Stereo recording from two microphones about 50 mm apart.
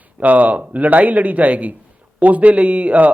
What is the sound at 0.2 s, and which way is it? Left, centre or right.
A man's voice, right.